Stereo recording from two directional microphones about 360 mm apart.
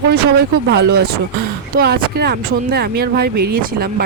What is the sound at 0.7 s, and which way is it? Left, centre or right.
Speech, right.